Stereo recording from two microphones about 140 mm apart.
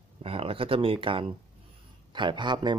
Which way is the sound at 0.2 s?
40° right (ahead or behind).